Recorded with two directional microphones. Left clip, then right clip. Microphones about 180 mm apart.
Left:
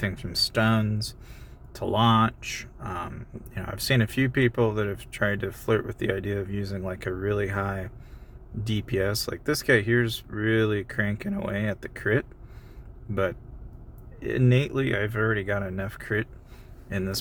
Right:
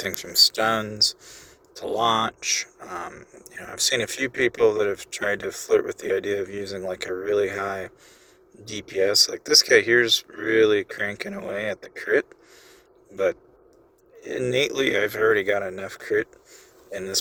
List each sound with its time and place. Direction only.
0.1 s speech: 15° right (ahead or behind)
14.4 s speech: 20° right (ahead or behind)
15.5 s speech: 10° right (ahead or behind)